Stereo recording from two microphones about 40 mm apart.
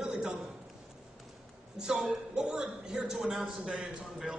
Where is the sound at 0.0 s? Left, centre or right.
Right.